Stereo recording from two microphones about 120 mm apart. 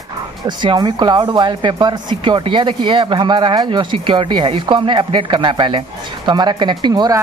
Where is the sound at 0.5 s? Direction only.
40° right (ahead or behind).